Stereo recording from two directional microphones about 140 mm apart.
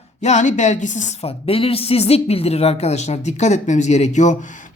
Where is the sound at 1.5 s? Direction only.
45° left (ahead or behind).